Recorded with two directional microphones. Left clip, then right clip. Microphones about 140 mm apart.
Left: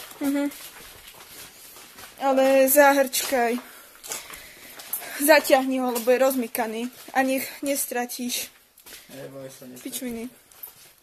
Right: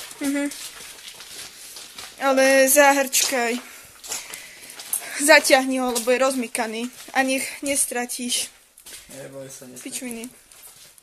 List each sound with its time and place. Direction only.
0.2 s speech: 10° left (ahead or behind)
2.1 s speech: centre (ahead or behind)
5.0 s speech: 5° left (ahead or behind)
5.9 s speech: 10° left (ahead or behind)
7.2 s speech: 15° left (ahead or behind)
9.8 s speech: 20° left (ahead or behind)